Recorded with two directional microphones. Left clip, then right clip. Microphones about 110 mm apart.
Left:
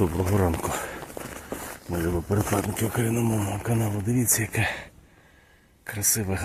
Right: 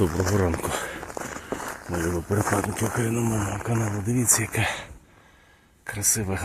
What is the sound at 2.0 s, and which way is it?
Speech, 10° left (ahead or behind).